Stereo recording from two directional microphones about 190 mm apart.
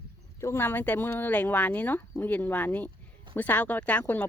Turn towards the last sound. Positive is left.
turn(degrees=10)  # may be behind; listen again after turning